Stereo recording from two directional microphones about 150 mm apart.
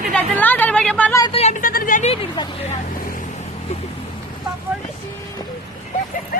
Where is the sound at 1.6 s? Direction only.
70° left (ahead or behind).